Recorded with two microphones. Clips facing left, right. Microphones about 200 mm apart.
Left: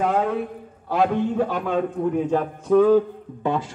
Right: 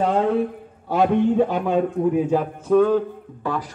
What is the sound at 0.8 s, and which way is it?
Speech, 20° right (ahead or behind).